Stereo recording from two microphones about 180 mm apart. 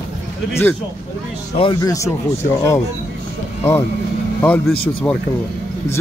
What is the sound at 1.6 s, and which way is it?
Speech, 25° left (ahead or behind).